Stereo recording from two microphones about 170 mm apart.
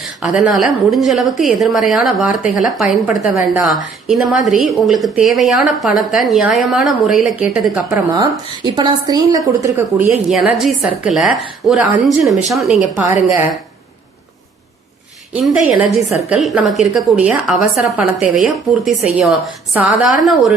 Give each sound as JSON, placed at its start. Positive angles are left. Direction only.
{"t": 0.2, "sound": "speech", "side_deg": -5}
{"t": 3.3, "sound": "a woman's voice", "side_deg": -15}
{"t": 3.7, "sound": "speech", "side_deg": 0}
{"t": 8.1, "sound": "a woman's voice", "side_deg": -25}
{"t": 15.3, "sound": "speech", "side_deg": -5}